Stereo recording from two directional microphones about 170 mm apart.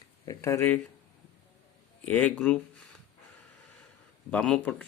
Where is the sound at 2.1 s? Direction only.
10° left (ahead or behind).